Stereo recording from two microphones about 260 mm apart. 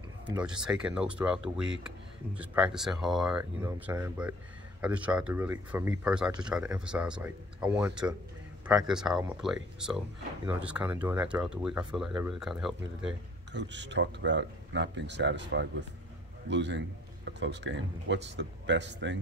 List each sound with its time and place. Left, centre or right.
0.7 s speech: centre
13.5 s a man's voice: right